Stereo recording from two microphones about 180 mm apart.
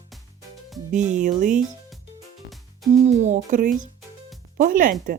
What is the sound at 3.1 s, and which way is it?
Speech, 40° right (ahead or behind).